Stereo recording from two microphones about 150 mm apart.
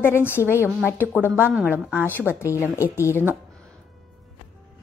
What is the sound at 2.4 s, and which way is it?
Speech, 20° left (ahead or behind).